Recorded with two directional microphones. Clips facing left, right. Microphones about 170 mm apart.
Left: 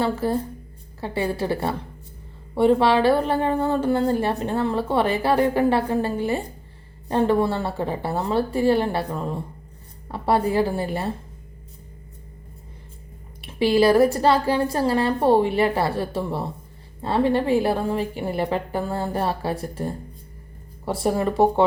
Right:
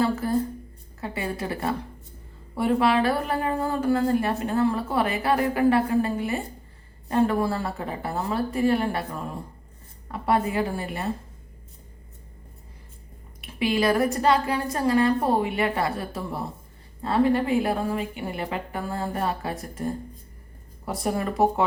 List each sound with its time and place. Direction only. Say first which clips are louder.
0.0 s a woman's voice: left 1 dB; 30° left (ahead or behind)
13.4 s a woman's voice: left 6 dB; 35° left (ahead or behind)